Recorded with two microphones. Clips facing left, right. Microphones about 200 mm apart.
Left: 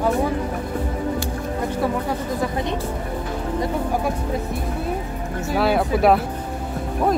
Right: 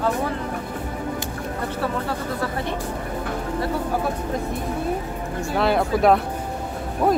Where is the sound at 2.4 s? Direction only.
15° left (ahead or behind).